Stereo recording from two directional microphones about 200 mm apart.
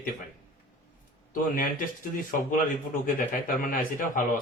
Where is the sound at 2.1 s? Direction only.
40° left (ahead or behind).